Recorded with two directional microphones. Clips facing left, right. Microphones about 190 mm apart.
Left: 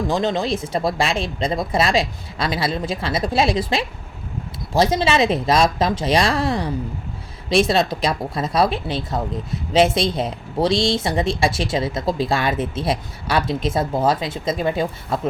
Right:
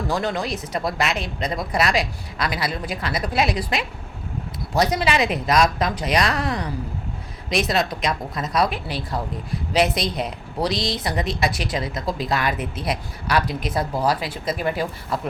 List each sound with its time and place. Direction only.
0.1 s speech: 25° left (ahead or behind)